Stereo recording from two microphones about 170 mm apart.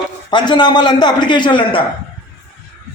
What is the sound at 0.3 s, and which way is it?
A man's voice, 25° left (ahead or behind).